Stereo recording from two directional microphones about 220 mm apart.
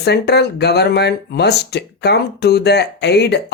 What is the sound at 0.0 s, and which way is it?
Speech, 50° left (ahead or behind).